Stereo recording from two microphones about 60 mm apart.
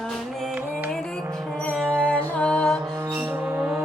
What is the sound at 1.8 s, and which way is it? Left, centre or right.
Music, centre.